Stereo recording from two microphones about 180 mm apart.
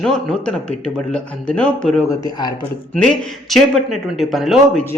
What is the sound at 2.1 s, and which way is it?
Speech, 20° left (ahead or behind).